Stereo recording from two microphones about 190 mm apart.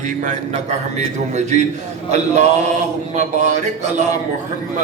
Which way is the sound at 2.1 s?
40° right (ahead or behind).